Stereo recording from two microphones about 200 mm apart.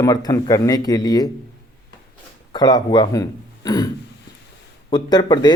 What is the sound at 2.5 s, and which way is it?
Speech, 20° left (ahead or behind).